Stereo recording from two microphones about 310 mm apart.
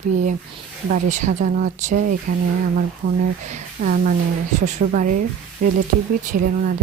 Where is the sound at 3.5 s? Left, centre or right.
Right.